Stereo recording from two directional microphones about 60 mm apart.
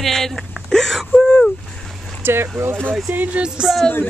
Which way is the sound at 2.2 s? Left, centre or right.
Right.